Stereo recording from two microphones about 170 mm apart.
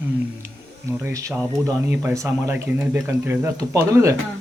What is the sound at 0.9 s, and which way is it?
A man's voice, 15° right (ahead or behind).